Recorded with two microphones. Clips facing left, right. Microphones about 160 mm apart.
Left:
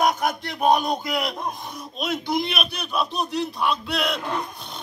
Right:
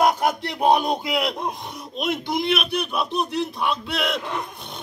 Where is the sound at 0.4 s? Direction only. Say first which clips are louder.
Left 1 dB; 30° right (ahead or behind).